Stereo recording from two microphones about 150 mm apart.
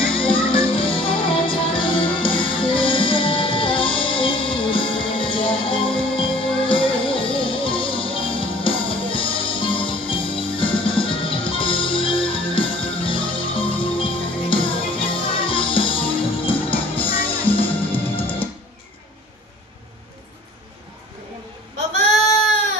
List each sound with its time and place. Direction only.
0.0 s music: 35° left (ahead or behind)